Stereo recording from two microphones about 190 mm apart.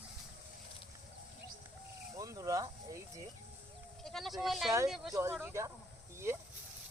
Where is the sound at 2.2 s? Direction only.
15° right (ahead or behind).